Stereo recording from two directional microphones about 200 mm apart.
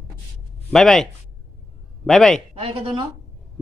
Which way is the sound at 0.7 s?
Centre (ahead or behind).